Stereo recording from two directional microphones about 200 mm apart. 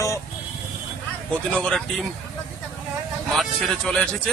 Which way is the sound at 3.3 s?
Centre (ahead or behind).